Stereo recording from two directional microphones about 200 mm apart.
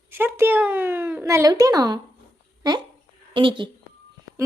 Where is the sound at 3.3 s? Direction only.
25° right (ahead or behind).